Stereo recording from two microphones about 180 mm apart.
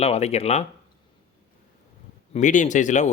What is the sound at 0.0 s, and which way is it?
Speech, 35° left (ahead or behind).